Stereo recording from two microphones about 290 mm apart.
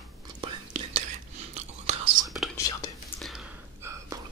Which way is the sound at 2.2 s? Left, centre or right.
Centre.